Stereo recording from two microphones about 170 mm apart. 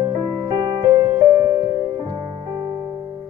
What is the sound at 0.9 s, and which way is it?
Music, 20° right (ahead or behind).